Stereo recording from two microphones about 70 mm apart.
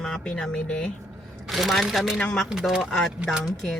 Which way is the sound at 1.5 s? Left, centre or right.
Centre.